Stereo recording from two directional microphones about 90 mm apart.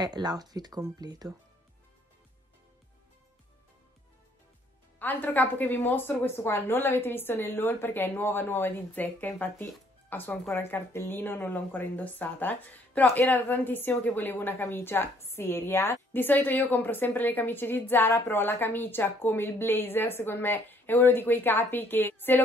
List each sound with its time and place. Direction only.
0.0 s speech: 50° right (ahead or behind)
4.9 s speech: 20° left (ahead or behind)